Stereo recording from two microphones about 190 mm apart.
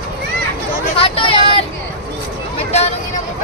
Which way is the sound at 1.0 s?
30° left (ahead or behind).